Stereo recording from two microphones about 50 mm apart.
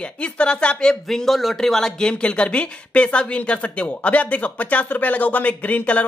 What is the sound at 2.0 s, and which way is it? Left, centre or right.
Speech, centre.